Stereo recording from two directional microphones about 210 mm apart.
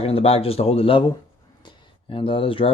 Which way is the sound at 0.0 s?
30° left (ahead or behind).